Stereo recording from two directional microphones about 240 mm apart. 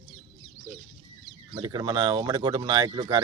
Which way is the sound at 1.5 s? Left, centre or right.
Centre.